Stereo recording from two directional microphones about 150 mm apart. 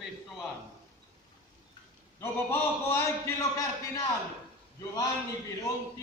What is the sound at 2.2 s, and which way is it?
A man's voice, 15° left (ahead or behind).